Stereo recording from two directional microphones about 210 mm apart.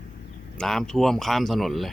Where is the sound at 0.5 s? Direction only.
Centre (ahead or behind).